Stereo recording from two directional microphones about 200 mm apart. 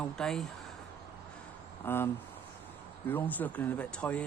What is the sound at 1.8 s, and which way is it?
Speech, 10° left (ahead or behind).